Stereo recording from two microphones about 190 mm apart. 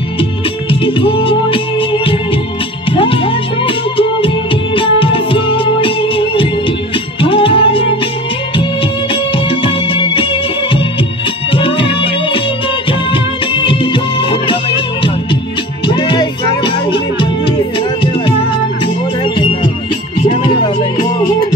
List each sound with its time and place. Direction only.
0.2 s music: 25° left (ahead or behind)
9.1 s music: 25° left (ahead or behind)
15.9 s music: 25° left (ahead or behind)